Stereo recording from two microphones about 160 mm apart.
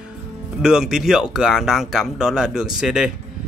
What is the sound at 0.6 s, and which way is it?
Speech, 5° right (ahead or behind).